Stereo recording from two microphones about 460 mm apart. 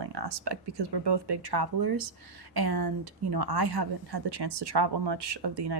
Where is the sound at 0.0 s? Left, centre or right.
Right.